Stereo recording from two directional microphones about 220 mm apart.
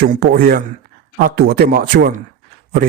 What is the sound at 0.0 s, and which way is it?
A man's voice, 45° right (ahead or behind).